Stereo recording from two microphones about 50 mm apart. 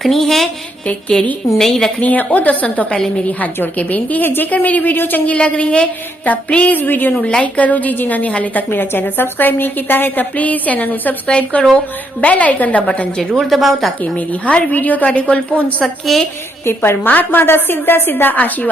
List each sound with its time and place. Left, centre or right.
0.0 s a woman's voice: centre
1.1 s a woman's voice: centre
2.0 s a woman's voice: left
5.2 s a woman's voice: left
7.2 s a woman's voice: left
13.0 s a woman's voice: centre
13.4 s a woman's voice: centre
14.2 s a woman's voice: left
15.8 s a woman's voice: centre
16.6 s a woman's voice: left
17.0 s a woman's voice: left
18.3 s a woman's voice: left